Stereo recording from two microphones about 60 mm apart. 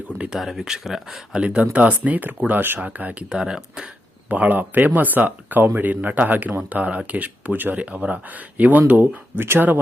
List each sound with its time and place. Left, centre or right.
0.3 s speech: centre
1.4 s speech: centre
3.3 s speech: centre
4.3 s speech: right